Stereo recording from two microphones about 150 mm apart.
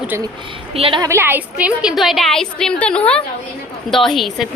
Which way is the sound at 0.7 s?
40° right (ahead or behind).